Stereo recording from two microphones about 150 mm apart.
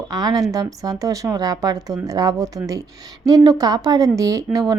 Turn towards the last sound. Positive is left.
turn(degrees=-20)  # may be behind; listen again after turning